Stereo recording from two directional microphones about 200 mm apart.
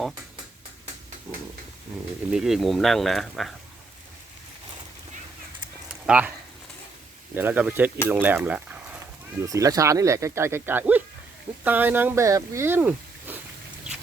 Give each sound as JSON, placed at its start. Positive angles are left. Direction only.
{"t": 2.3, "sound": "speech", "side_deg": 0}
{"t": 5.9, "sound": "a sound", "side_deg": -5}
{"t": 7.3, "sound": "speech", "side_deg": -10}